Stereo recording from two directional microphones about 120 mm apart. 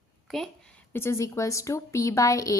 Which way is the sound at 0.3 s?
5° left (ahead or behind).